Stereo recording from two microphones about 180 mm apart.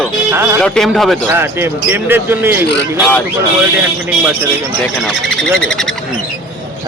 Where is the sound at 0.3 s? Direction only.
15° right (ahead or behind).